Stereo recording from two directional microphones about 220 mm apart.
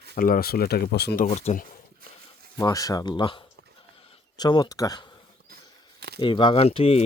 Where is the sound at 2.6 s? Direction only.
15° left (ahead or behind).